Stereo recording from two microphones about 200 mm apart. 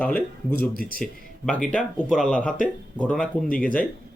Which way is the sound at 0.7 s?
45° left (ahead or behind).